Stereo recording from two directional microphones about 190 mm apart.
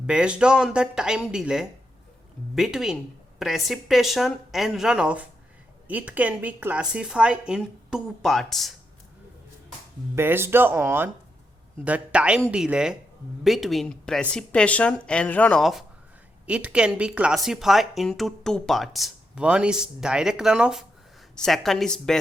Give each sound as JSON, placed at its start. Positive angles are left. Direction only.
{"t": 0.1, "sound": "a woman's voice", "side_deg": -5}
{"t": 10.2, "sound": "a woman's voice", "side_deg": -10}